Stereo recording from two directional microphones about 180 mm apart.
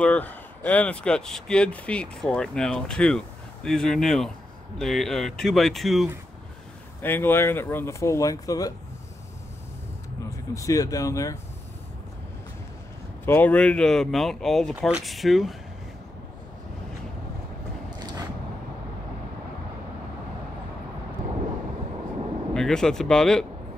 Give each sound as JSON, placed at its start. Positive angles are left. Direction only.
{"t": 0.0, "sound": "speech", "side_deg": 10}
{"t": 7.0, "sound": "speech", "side_deg": 10}
{"t": 10.3, "sound": "speech", "side_deg": 15}
{"t": 13.2, "sound": "speech", "side_deg": 10}
{"t": 22.5, "sound": "speech", "side_deg": 5}